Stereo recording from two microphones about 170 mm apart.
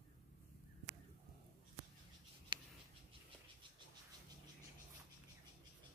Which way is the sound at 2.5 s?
30° right (ahead or behind).